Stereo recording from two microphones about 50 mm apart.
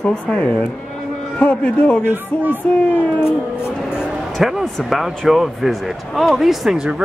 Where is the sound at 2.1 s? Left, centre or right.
Right.